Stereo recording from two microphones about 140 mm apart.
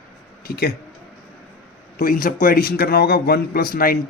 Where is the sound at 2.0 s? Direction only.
80° left.